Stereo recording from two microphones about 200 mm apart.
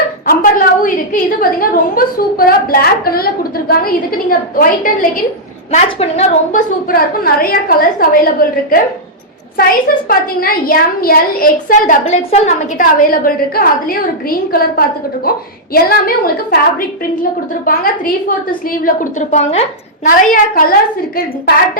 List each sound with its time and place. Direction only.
0.8 s a woman's voice: 45° left (ahead or behind)
5.7 s a woman's voice: 35° left (ahead or behind)
12.0 s a woman's voice: 30° left (ahead or behind)
20.1 s a woman's voice: 45° left (ahead or behind)